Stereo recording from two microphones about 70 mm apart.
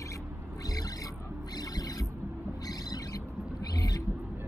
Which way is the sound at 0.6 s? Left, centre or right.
Left.